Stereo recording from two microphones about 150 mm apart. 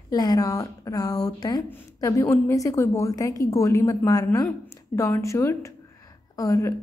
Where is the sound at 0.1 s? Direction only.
25° left (ahead or behind).